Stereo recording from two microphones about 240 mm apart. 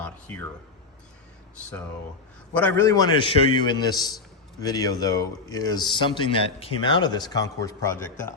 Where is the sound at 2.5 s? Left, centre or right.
Centre.